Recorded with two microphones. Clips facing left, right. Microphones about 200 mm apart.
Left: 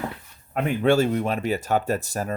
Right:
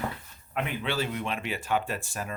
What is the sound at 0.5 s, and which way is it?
Speech, 45° left (ahead or behind).